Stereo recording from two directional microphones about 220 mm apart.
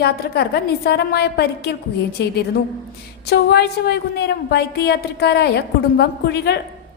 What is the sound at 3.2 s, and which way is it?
A woman's voice, 50° left (ahead or behind).